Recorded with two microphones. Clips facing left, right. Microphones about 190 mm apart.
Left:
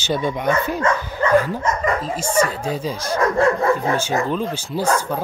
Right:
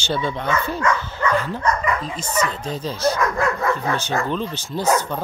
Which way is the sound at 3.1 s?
30° left (ahead or behind).